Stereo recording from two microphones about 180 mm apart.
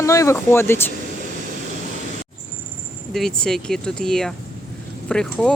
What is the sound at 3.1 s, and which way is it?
Speech, 5° left (ahead or behind).